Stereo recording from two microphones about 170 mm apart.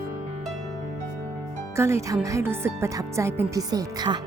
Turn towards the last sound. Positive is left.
turn(degrees=-25)  # may be behind; listen again after turning